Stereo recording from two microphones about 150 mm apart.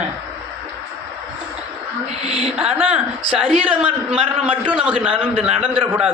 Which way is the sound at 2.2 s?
45° right (ahead or behind).